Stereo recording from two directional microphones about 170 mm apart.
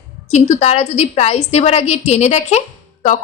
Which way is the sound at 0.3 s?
45° left (ahead or behind).